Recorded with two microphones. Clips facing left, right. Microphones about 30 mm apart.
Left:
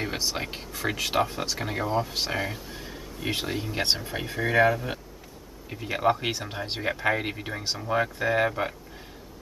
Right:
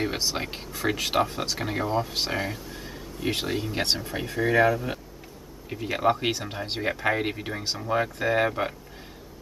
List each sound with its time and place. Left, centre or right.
0.0 s speech: centre
3.8 s speech: centre
5.7 s speech: centre